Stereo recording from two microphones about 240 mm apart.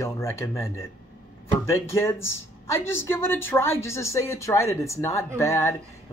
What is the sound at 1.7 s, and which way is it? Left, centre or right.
A man's voice, centre.